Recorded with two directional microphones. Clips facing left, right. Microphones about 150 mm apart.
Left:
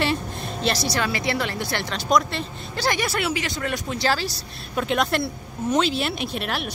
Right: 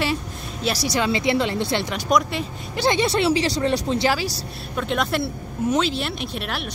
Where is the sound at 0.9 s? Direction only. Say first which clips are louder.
Right 4 dB; 20° right (ahead or behind).